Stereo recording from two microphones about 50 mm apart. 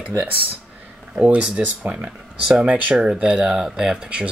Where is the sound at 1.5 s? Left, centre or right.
Right.